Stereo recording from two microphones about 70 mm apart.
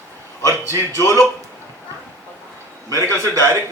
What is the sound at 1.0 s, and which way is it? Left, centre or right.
Speech, left.